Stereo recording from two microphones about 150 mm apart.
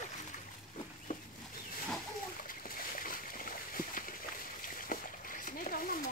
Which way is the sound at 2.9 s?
65° left (ahead or behind).